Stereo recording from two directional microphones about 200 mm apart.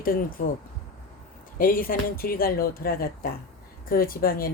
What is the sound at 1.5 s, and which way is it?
Speech, 45° left (ahead or behind).